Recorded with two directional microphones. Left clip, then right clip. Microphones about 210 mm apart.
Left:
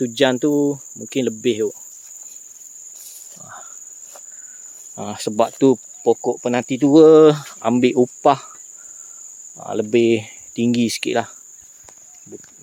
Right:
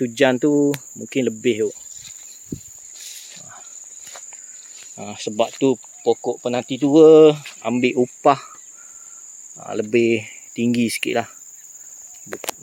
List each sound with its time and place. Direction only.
0.0 s cricket: 5° left (ahead or behind)
4.9 s speech: 20° left (ahead or behind)
7.9 s speech: 15° left (ahead or behind)
9.6 s speech: 10° left (ahead or behind)